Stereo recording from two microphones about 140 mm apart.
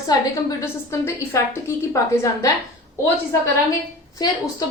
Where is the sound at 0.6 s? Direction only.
20° left (ahead or behind).